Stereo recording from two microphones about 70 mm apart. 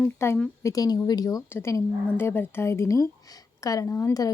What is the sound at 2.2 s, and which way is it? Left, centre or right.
A woman's voice, left.